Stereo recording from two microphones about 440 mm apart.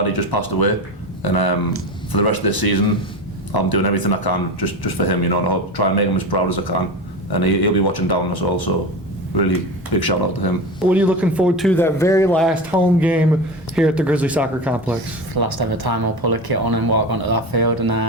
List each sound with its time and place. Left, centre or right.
0.0 s speech: left
9.9 s speech: left
10.8 s speech: centre
15.4 s speech: right